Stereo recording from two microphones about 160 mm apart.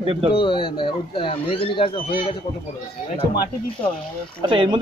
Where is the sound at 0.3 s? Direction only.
35° left (ahead or behind).